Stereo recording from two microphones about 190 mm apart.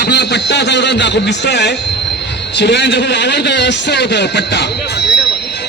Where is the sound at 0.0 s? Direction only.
60° left (ahead or behind).